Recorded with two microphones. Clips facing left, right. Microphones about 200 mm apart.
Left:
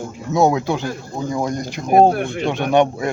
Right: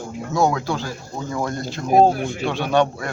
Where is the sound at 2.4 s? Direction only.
20° left (ahead or behind).